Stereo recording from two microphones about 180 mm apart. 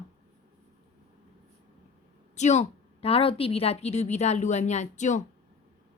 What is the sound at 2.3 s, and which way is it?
Speech, 40° left (ahead or behind).